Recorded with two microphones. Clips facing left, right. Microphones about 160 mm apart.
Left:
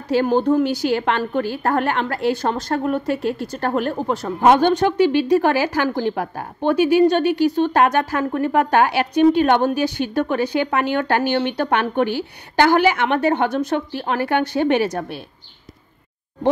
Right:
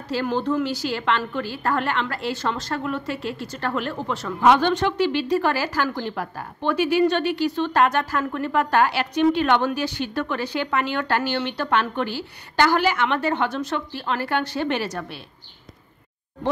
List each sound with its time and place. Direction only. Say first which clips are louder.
0.1 s a woman's voice: left 7 dB; 50° left (ahead or behind)